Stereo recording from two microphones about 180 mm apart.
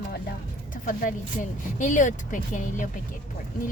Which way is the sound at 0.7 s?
50° left (ahead or behind).